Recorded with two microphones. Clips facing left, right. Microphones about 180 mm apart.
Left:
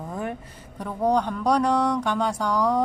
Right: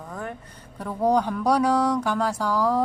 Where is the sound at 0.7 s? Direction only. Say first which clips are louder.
Right 1 dB; 5° right (ahead or behind).